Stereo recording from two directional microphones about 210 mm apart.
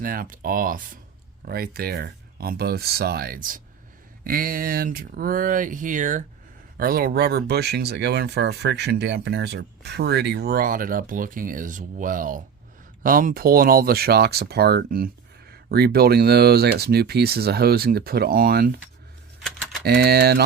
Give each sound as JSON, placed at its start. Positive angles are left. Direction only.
{"t": 0.0, "sound": "speech", "side_deg": -40}
{"t": 19.8, "sound": "speech", "side_deg": -50}